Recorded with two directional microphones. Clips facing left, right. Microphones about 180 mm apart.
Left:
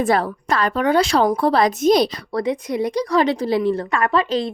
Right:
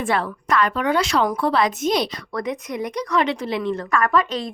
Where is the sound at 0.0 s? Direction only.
40° left (ahead or behind).